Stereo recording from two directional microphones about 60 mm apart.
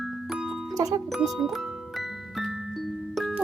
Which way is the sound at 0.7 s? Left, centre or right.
Right.